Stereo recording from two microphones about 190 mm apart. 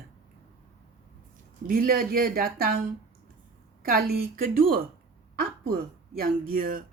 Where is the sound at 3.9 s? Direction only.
50° right (ahead or behind).